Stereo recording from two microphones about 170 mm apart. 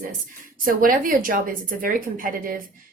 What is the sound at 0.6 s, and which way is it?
A woman's voice, 55° right (ahead or behind).